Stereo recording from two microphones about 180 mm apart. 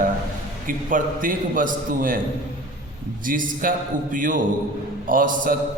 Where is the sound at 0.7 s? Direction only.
50° right (ahead or behind).